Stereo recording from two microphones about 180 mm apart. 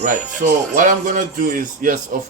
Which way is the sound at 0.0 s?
45° right (ahead or behind).